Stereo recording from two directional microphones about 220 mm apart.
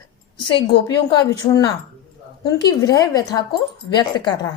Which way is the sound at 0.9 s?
20° left (ahead or behind).